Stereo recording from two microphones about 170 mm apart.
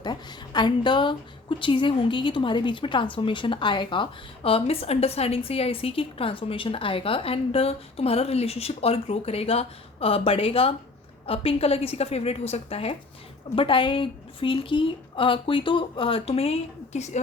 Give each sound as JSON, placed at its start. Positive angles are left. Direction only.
{"t": 0.0, "sound": "a woman's voice", "side_deg": 25}